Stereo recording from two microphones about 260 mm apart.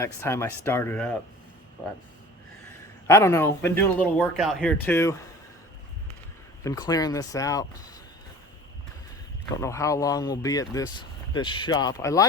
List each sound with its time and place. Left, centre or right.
0.0 s speech: centre
3.1 s speech: centre
6.6 s speech: centre
9.6 s speech: centre